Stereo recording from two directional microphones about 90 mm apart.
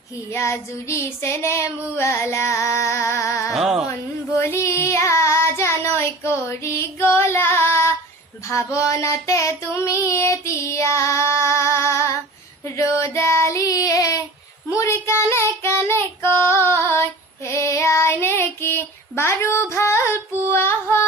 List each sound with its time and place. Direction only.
0.3 s child singing: 30° left (ahead or behind)
3.5 s a sound: 5° right (ahead or behind)
4.4 s child singing: 30° left (ahead or behind)
13.1 s child singing: 30° left (ahead or behind)